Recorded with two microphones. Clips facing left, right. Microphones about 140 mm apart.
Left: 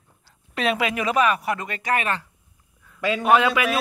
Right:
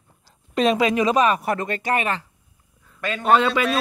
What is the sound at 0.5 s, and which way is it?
Speech, 35° right (ahead or behind).